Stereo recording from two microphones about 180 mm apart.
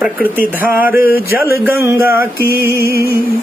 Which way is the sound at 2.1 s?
55° left (ahead or behind).